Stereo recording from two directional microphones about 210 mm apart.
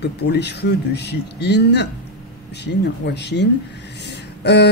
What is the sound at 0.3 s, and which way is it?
Speech, 50° left (ahead or behind).